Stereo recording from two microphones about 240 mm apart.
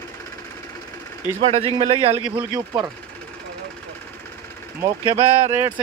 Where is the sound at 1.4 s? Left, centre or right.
Right.